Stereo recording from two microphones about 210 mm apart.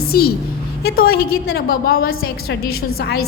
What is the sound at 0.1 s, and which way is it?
A woman's voice, 45° left (ahead or behind).